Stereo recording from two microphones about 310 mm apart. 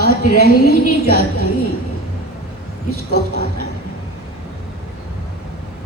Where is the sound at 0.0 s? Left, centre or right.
Left.